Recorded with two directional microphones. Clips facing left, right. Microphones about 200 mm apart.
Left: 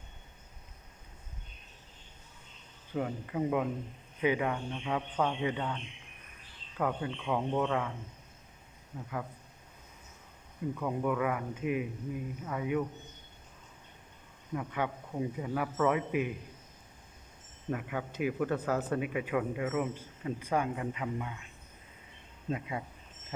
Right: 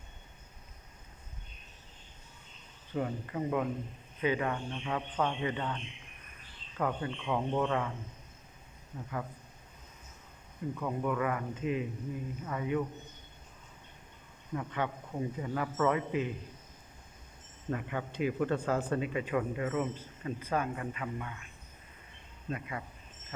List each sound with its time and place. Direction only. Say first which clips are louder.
2.9 s speech: left 1 dB; 5° left (ahead or behind)
8.9 s speech: even; centre (ahead or behind)
10.8 s speech: left 1 dB; 5° left (ahead or behind)
14.5 s speech: left 1 dB; 10° left (ahead or behind)
17.7 s speech: even; 5° left (ahead or behind)
22.4 s speech: left 3 dB; 20° left (ahead or behind)